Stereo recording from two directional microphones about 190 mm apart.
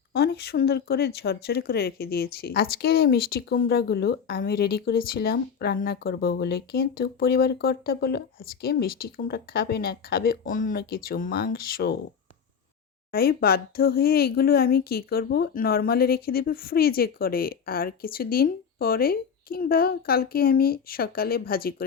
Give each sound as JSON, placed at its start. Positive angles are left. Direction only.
{"t": 0.1, "sound": "speech", "side_deg": 60}
{"t": 13.1, "sound": "speech", "side_deg": 55}